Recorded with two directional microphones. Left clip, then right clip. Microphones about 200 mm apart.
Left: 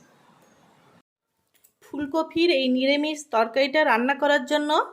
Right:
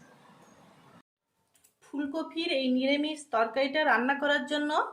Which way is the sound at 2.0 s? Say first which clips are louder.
Left 10 dB; 45° left (ahead or behind).